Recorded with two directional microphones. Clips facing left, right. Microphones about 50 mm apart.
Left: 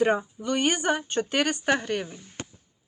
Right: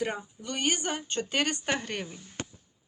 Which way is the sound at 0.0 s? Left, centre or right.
Left.